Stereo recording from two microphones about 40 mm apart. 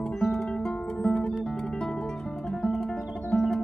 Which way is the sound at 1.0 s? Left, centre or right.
Left.